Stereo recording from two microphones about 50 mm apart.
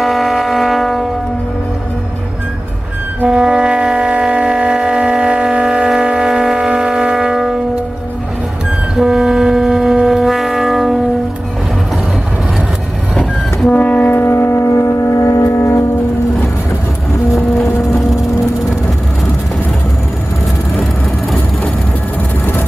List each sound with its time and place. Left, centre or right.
0.0 s air horn: centre
3.3 s a sound: centre
6.7 s air horn: centre
8.9 s vehicle: centre
13.1 s train: centre
13.7 s train: left
14.2 s a sound: left
14.7 s music: left
15.5 s train: left